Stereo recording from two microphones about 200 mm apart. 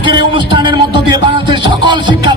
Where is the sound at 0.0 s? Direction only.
25° right (ahead or behind).